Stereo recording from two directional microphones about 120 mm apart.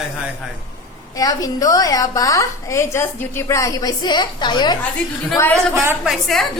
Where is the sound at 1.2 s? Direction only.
30° left (ahead or behind).